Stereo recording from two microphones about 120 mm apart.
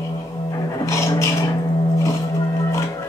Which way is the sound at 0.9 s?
25° left (ahead or behind).